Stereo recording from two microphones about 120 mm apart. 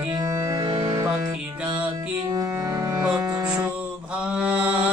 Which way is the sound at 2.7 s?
30° right (ahead or behind).